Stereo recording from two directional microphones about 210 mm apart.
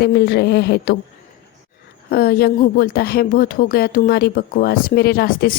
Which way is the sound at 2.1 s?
45° left (ahead or behind).